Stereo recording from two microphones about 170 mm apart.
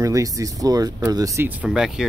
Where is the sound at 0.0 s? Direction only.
20° right (ahead or behind).